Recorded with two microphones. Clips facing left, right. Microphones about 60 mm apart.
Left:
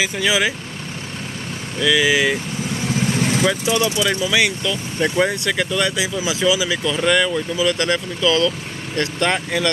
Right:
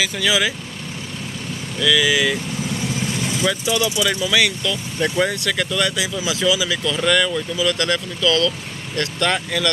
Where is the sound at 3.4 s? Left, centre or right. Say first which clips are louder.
Right 2 dB; centre.